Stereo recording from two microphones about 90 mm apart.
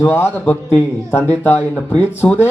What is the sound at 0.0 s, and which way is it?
Speech, 25° left (ahead or behind).